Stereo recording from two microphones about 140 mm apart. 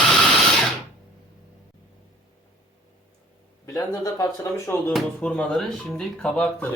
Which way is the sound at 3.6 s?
25° left (ahead or behind).